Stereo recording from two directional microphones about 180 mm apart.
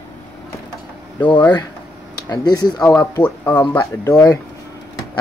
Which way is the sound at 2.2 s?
20° left (ahead or behind).